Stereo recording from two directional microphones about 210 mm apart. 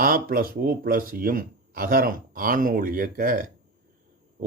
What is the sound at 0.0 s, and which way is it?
Speech, 45° right (ahead or behind).